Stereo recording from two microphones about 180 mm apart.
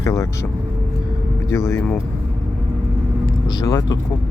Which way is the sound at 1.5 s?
15° left (ahead or behind).